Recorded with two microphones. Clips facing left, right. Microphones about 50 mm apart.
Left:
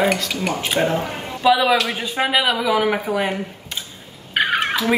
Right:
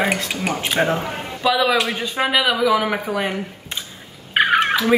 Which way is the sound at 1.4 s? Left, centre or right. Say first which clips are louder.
Left 2 dB; centre.